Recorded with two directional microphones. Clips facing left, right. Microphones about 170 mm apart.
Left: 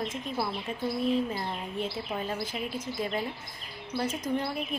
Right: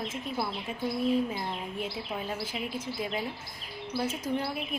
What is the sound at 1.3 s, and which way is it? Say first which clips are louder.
A woman's voice: left 1 dB; centre (ahead or behind).